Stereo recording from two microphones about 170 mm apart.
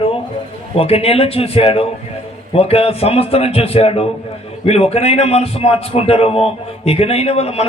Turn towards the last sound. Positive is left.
turn(degrees=35)  # may be behind; listen again after turning